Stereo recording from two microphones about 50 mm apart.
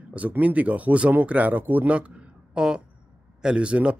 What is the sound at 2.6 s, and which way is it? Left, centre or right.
Speech, centre.